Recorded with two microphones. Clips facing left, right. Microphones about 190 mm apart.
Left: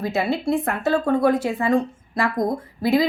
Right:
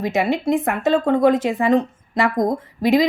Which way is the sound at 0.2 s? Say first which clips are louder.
Right 3 dB; 20° right (ahead or behind).